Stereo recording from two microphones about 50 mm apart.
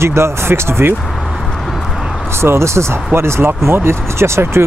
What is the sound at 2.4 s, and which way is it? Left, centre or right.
Speech, right.